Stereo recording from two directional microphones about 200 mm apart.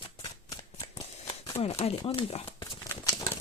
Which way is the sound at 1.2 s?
30° left (ahead or behind).